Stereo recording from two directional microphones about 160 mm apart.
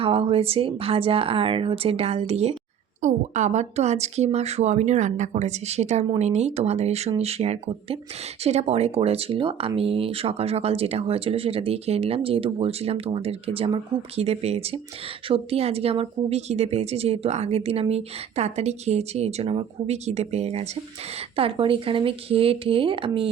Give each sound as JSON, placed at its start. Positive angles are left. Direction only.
{"t": 0.0, "sound": "speech", "side_deg": -35}